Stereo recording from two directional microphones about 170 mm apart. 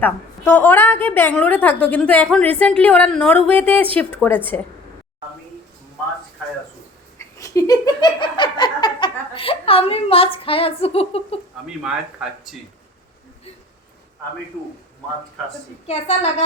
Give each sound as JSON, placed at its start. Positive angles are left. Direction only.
{"t": 0.0, "sound": "a woman's voice", "side_deg": 10}
{"t": 7.2, "sound": "a sound", "side_deg": 20}
{"t": 15.9, "sound": "a woman's voice", "side_deg": 40}